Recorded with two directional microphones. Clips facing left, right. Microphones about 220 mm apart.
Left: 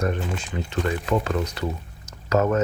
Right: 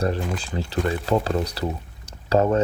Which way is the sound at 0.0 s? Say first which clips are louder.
Right 1 dB; 35° right (ahead or behind).